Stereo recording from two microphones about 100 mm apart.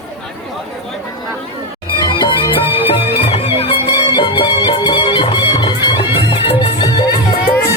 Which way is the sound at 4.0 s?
60° left (ahead or behind).